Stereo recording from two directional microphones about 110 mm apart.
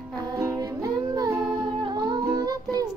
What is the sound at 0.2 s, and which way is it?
Music, 35° right (ahead or behind).